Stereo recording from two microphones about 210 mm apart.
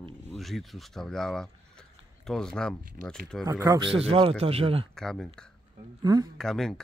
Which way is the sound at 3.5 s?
15° right (ahead or behind).